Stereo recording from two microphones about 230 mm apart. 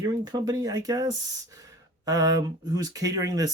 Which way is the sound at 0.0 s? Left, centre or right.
Centre.